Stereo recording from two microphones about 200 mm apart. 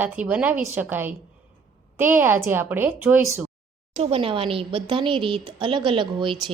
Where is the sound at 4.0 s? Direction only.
30° right (ahead or behind).